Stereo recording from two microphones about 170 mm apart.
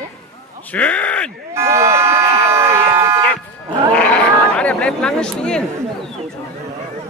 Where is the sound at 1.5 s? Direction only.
15° right (ahead or behind).